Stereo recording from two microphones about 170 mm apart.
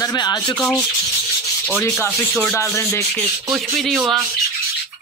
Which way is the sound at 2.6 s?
15° left (ahead or behind).